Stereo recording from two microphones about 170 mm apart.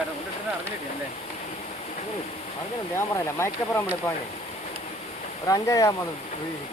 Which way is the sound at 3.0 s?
15° left (ahead or behind).